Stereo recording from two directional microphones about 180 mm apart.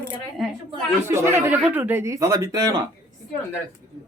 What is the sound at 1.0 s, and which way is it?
A woman's voice, 15° right (ahead or behind).